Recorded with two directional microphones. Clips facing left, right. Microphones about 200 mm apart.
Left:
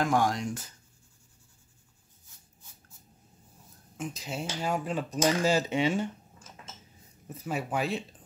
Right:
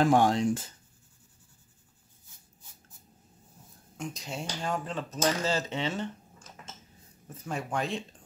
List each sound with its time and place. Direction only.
0.0 s speech: 30° right (ahead or behind)
3.9 s speech: 5° left (ahead or behind)
7.2 s speech: 5° left (ahead or behind)